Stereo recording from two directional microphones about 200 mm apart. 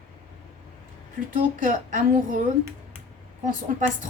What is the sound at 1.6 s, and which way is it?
Speech, 40° right (ahead or behind).